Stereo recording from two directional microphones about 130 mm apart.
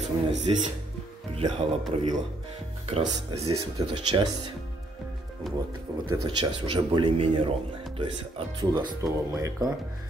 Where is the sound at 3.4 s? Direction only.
40° right (ahead or behind).